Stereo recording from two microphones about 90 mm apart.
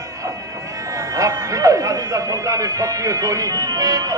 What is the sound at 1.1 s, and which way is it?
Speech, 40° right (ahead or behind).